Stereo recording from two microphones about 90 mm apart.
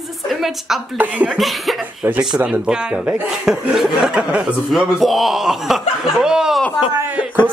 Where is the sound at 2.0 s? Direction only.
25° right (ahead or behind).